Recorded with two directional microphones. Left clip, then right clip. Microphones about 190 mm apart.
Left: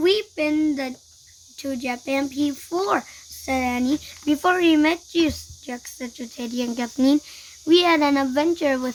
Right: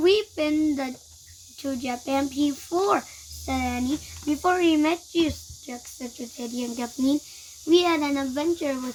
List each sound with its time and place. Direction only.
0.0 s child singing: 20° left (ahead or behind)
1.5 s speech: 20° left (ahead or behind); by 8.8 s 35° left (ahead or behind)